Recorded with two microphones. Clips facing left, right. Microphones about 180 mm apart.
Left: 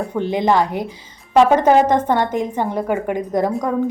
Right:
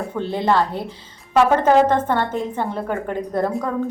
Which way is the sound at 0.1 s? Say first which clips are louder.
Left 2 dB; 15° left (ahead or behind).